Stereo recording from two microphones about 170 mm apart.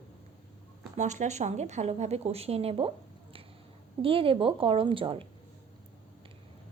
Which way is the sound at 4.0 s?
30° right (ahead or behind).